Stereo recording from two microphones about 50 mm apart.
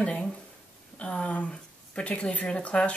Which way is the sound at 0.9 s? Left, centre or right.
Left.